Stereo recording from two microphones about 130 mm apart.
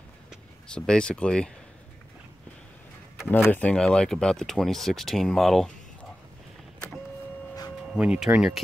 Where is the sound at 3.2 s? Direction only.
15° left (ahead or behind).